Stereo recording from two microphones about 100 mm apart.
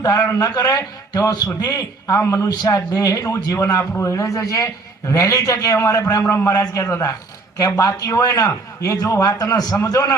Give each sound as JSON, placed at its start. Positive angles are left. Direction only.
{"t": 0.0, "sound": "a man's voice", "side_deg": 40}